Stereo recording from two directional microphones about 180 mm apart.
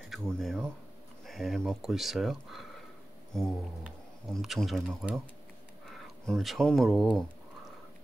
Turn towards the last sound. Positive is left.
turn(degrees=0)  # may be behind; listen again after turning